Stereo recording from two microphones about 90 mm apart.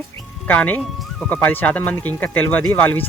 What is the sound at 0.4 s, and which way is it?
Speech, 20° left (ahead or behind).